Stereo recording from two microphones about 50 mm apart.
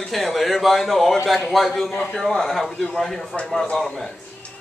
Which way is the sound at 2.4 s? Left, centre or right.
Centre.